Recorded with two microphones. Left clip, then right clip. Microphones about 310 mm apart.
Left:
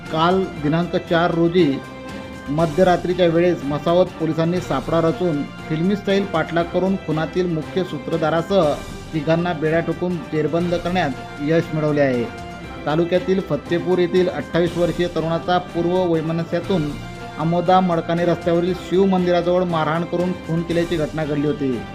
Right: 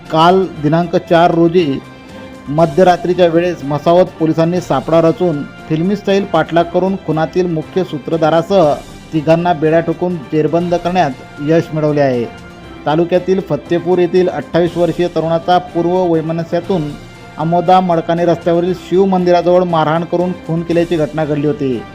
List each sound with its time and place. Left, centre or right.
0.1 s speech: centre
2.7 s speech: centre